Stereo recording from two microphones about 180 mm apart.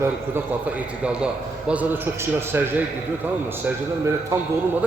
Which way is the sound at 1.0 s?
5° right (ahead or behind).